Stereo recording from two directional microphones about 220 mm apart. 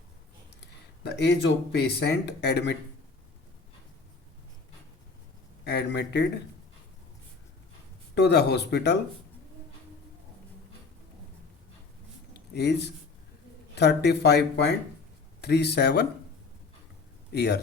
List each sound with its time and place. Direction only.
0.6 s speech: 50° left (ahead or behind)
5.6 s speech: 50° left (ahead or behind)
8.1 s speech: 50° left (ahead or behind)
12.5 s speech: 50° left (ahead or behind)
17.3 s speech: 50° left (ahead or behind)